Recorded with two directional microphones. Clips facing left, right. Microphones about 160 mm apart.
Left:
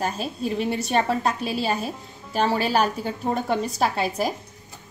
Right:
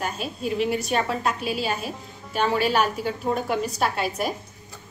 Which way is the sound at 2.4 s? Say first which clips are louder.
Even; 35° left (ahead or behind).